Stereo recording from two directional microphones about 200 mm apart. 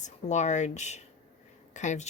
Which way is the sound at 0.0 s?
35° left (ahead or behind).